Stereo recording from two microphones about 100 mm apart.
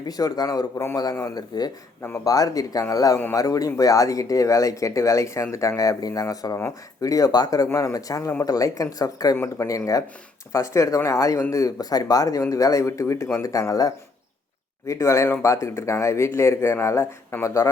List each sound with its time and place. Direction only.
0.1 s speech: 40° left (ahead or behind)
2.0 s speech: 20° left (ahead or behind)
2.2 s speech: 35° left (ahead or behind)